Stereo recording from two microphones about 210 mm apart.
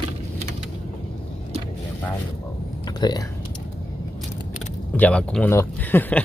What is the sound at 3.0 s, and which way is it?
Speech, 20° left (ahead or behind).